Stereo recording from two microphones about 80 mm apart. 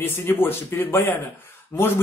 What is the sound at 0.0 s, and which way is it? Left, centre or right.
A man's voice, left.